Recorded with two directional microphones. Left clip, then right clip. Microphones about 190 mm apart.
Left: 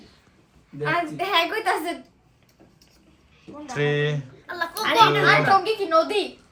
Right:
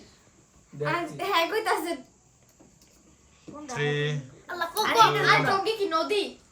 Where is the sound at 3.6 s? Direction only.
Centre (ahead or behind).